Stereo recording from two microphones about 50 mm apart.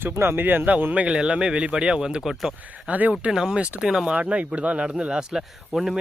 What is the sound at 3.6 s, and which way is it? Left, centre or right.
Speech, right.